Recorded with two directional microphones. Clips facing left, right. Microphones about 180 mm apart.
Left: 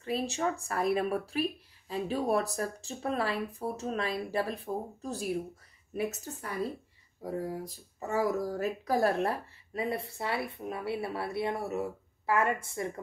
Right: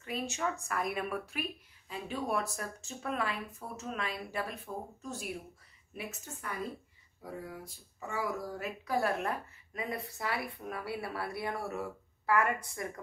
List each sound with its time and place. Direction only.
0.0 s speech: 35° left (ahead or behind)